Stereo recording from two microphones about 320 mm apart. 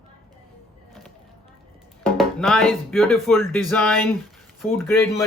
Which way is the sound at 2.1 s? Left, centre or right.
Centre.